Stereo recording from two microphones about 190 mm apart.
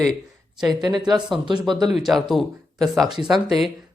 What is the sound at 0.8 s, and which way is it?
Speech, 20° right (ahead or behind).